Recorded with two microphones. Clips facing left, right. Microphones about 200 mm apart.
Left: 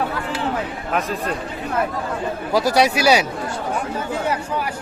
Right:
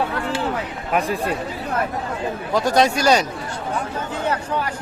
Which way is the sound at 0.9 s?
10° right (ahead or behind).